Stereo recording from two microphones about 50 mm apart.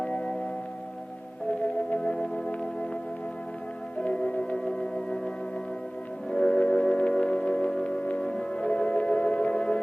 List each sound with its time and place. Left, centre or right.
0.0 s music: left
1.6 s music: centre
4.0 s music: left
6.3 s music: centre